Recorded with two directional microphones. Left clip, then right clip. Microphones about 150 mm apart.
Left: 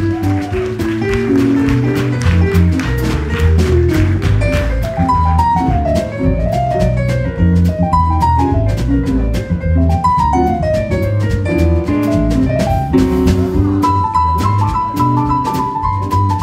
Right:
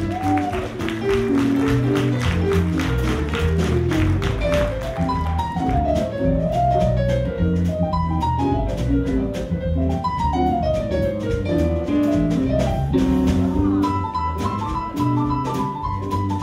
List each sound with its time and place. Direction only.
11.5 s music: 20° left (ahead or behind)